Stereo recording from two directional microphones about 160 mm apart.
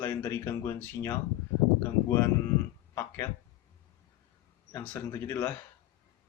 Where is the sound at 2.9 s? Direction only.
15° left (ahead or behind).